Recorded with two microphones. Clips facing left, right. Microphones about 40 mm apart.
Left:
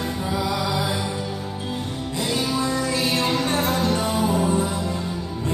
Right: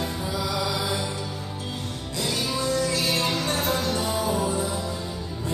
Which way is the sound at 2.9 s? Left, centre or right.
Left.